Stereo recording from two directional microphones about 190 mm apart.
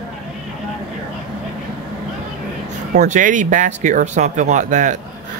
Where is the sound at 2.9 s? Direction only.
40° right (ahead or behind).